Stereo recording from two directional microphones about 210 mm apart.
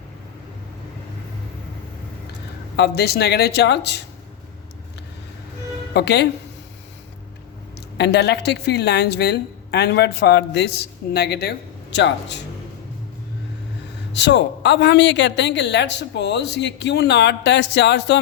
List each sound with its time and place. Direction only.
2.7 s a woman's voice: 50° left (ahead or behind)
5.9 s a woman's voice: 50° left (ahead or behind)
7.8 s a woman's voice: 55° left (ahead or behind)
14.1 s a woman's voice: 55° left (ahead or behind)